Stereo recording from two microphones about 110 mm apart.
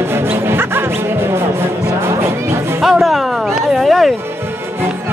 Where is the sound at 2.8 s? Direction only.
Centre (ahead or behind).